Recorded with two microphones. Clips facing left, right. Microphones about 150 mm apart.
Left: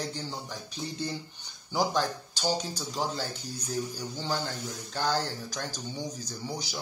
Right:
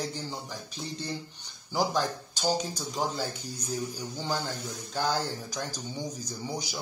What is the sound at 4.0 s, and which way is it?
Speech, 10° right (ahead or behind).